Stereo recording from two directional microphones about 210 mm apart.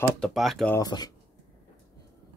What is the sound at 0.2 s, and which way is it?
Speech, centre (ahead or behind).